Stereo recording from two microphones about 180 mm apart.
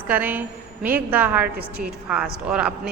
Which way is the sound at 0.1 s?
10° right (ahead or behind).